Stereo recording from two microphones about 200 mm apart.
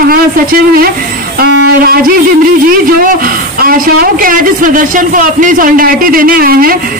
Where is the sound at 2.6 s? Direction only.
45° right (ahead or behind).